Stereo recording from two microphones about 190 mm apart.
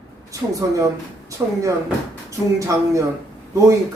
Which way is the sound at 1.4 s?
15° right (ahead or behind).